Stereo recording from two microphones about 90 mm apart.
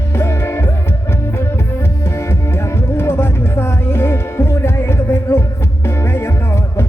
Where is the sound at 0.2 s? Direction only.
25° left (ahead or behind).